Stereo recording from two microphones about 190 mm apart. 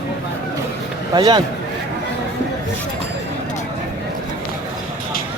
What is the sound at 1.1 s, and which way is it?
Speech, 20° right (ahead or behind).